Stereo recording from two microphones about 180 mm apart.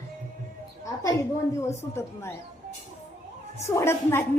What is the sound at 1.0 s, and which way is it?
A woman's voice, 15° left (ahead or behind).